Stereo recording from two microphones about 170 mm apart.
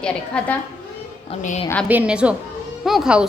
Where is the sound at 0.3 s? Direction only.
5° left (ahead or behind).